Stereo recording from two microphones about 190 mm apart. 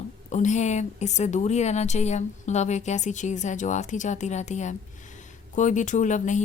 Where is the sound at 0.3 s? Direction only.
40° left (ahead or behind).